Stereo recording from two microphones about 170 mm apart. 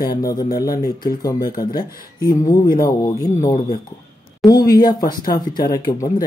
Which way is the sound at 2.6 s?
60° left (ahead or behind).